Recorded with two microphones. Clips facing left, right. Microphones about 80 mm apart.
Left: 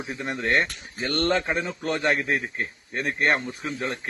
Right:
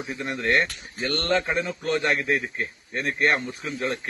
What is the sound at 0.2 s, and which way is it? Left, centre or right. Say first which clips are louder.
A man's voice: right 1 dB; left.